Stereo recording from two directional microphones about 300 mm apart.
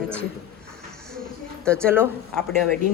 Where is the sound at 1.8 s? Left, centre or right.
Centre.